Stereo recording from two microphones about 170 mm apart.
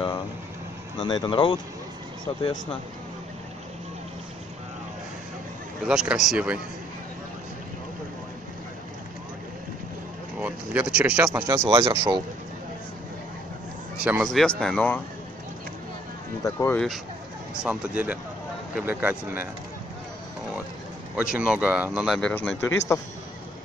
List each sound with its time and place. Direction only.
0.9 s speech: 25° left (ahead or behind)
5.9 s speech: 5° right (ahead or behind)
10.4 s speech: 10° right (ahead or behind)
11.6 s speech: 25° right (ahead or behind)
14.0 s speech: 5° right (ahead or behind)
16.4 s a man's voice: 15° left (ahead or behind)
17.6 s speech: 10° right (ahead or behind)
21.2 s speech: 5° right (ahead or behind)
22.3 s a man's voice: 10° left (ahead or behind)